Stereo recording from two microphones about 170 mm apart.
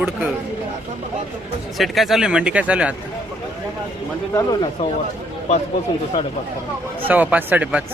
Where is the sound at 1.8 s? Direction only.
Centre (ahead or behind).